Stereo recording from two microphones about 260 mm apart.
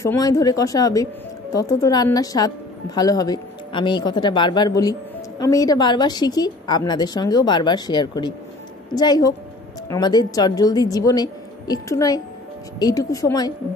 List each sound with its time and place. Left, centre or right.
0.0 s a woman's voice: centre